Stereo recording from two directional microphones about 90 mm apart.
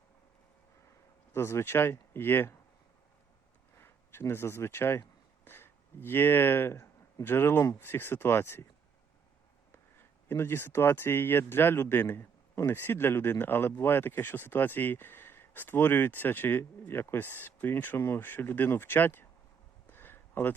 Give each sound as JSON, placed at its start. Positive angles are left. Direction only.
{"t": 1.3, "sound": "speech", "side_deg": 30}
{"t": 3.8, "sound": "speech", "side_deg": 25}
{"t": 9.7, "sound": "speech", "side_deg": 25}
{"t": 19.9, "sound": "a sound", "side_deg": 25}